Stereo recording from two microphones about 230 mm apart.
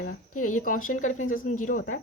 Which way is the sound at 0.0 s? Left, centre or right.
Left.